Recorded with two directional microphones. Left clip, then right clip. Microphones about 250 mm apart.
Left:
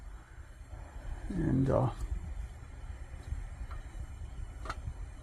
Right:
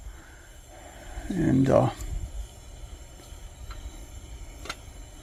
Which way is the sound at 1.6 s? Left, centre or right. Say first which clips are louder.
Right 10 dB; right.